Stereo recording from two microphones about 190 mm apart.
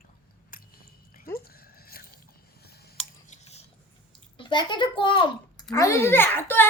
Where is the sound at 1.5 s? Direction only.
50° left (ahead or behind).